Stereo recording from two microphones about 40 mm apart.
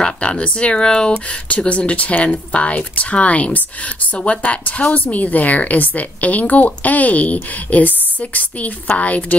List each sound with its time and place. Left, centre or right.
0.2 s speech: left
4.6 s speech: left